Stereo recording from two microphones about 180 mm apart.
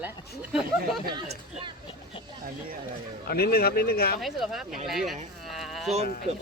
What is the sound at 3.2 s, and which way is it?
Speech, 60° left (ahead or behind).